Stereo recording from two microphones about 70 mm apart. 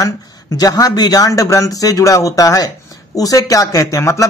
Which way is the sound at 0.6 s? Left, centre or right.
Left.